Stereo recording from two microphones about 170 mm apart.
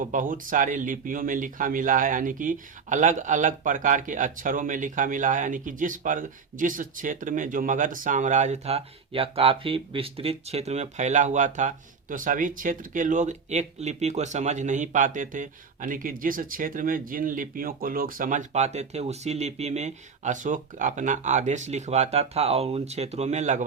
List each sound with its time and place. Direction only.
0.0 s speech: 50° right (ahead or behind)